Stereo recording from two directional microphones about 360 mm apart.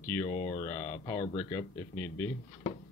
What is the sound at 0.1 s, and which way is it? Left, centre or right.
Speech, centre.